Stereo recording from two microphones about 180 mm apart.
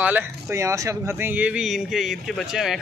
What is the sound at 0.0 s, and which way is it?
Speech, 10° right (ahead or behind).